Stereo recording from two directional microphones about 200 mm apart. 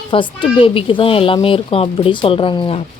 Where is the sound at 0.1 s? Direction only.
25° left (ahead or behind).